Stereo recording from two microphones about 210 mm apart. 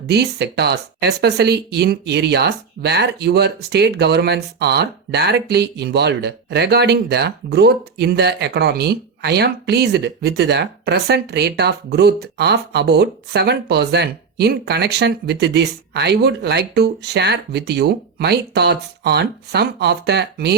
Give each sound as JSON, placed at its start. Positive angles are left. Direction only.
{"t": 0.1, "sound": "speech", "side_deg": -50}